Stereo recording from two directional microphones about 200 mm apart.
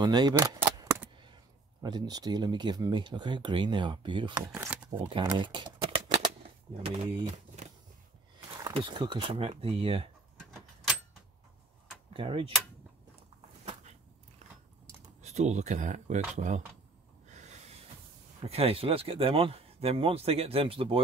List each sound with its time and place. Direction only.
0.0 s a sound: 20° right (ahead or behind)
1.2 s speech: 20° right (ahead or behind)
4.5 s speech: 5° right (ahead or behind)
5.2 s shuffling cards: 20° right (ahead or behind)
6.8 s speech: 35° right (ahead or behind)
8.6 s speech: 25° right (ahead or behind)
12.1 s speech: 25° right (ahead or behind)
15.2 s speech: 35° right (ahead or behind)
18.4 s speech: 30° right (ahead or behind)